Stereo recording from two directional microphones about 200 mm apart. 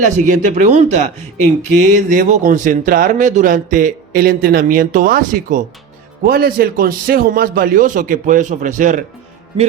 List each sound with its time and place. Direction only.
0.0 s a man's voice: 40° right (ahead or behind)